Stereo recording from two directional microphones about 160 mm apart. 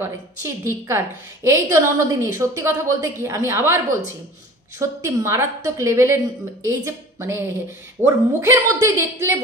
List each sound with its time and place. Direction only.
0.0 s a woman's voice: 15° right (ahead or behind)